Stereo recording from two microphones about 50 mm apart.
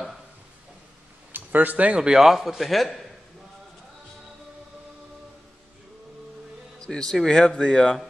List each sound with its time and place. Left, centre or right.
1.3 s speech: right
2.0 s a man's voice: centre
6.8 s a man's voice: centre